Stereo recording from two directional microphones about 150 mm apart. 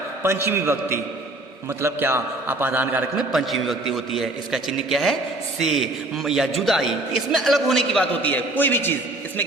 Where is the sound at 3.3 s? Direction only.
Centre (ahead or behind).